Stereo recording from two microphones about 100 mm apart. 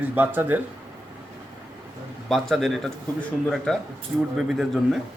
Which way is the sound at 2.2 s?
Centre (ahead or behind).